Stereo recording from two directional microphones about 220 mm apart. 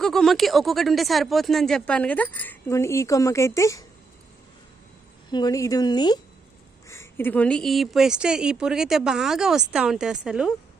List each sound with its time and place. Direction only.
0.0 s speech: centre (ahead or behind)
5.3 s speech: 15° left (ahead or behind); by 10.5 s 5° right (ahead or behind)